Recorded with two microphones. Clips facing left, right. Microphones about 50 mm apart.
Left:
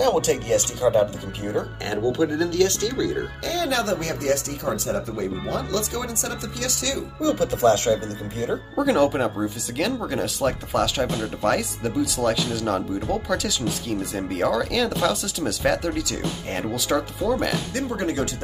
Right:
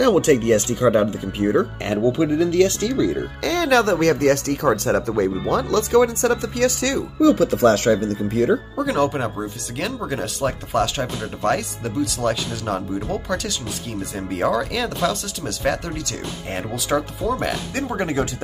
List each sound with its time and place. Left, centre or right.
0.2 s speech: right
2.1 s speech: right
3.4 s speech: right
5.7 s speech: right
7.2 s speech: right
8.7 s speech: centre
17.7 s speech: right